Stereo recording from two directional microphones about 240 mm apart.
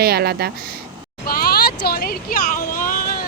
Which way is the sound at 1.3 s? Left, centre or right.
Left.